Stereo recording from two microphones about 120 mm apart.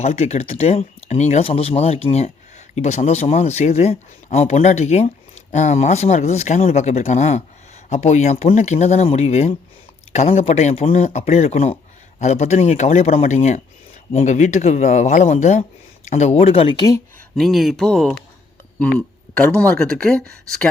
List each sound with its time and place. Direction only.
0.0 s speech: 65° left (ahead or behind)
12.2 s speech: 70° left (ahead or behind); by 16.7 s 55° left (ahead or behind)
16.7 s speech: 35° left (ahead or behind)
17.3 s speech: centre (ahead or behind)